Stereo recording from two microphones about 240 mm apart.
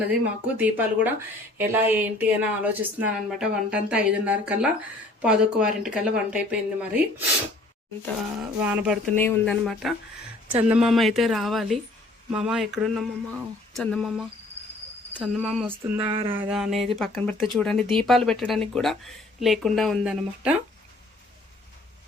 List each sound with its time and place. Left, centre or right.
0.1 s speech: centre
8.6 s speech: centre
9.1 s speech: centre
16.0 s a sound: right
16.3 s speech: centre